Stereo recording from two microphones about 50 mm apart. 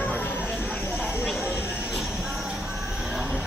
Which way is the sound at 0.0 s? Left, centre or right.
Left.